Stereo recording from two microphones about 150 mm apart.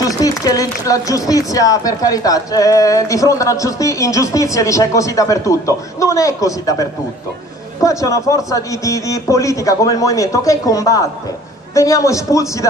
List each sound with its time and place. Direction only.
0.0 s a woman's voice: 25° left (ahead or behind)